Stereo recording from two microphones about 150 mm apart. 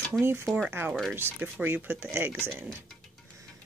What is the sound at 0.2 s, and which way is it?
Speech, 15° right (ahead or behind).